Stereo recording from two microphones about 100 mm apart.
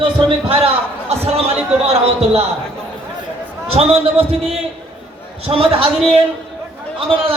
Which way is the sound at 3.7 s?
80° right.